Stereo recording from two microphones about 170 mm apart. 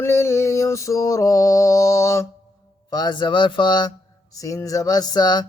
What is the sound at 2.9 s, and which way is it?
Speech, 25° left (ahead or behind).